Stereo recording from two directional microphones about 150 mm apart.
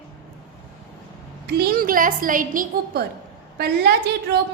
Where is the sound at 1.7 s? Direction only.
70° right (ahead or behind).